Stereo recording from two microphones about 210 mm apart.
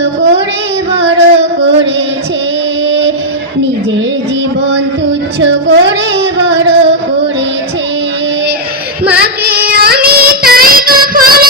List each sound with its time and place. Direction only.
0.0 s child singing: 55° right (ahead or behind)
1.4 s music: 55° right (ahead or behind)
5.4 s female singing: 60° right (ahead or behind)
9.1 s child singing: 45° right (ahead or behind)